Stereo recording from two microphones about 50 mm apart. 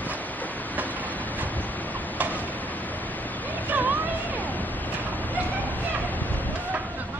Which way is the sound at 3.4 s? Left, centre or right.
Left.